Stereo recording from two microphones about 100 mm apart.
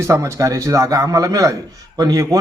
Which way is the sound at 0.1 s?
30° right (ahead or behind).